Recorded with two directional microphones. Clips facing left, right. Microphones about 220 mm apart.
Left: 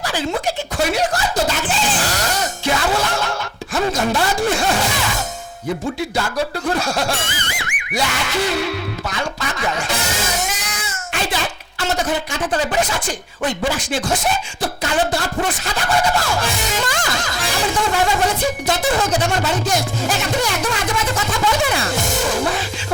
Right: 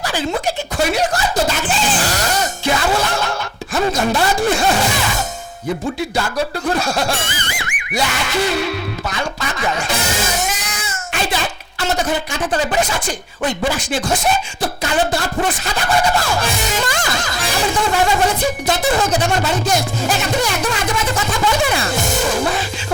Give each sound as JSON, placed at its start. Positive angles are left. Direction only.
{"t": 0.0, "sound": "speech", "side_deg": -15}
{"t": 0.9, "sound": "music", "side_deg": -10}
{"t": 3.8, "sound": "speech", "side_deg": -25}
{"t": 4.5, "sound": "music", "side_deg": -10}
{"t": 6.1, "sound": "speech", "side_deg": -15}
{"t": 11.9, "sound": "music", "side_deg": -15}
{"t": 15.2, "sound": "music", "side_deg": -15}
{"t": 21.2, "sound": "a sound", "side_deg": -10}